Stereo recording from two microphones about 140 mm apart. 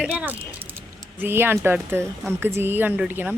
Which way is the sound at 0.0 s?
10° right (ahead or behind).